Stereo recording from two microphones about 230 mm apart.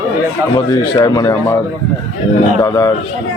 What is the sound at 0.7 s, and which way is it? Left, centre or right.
Speech, centre.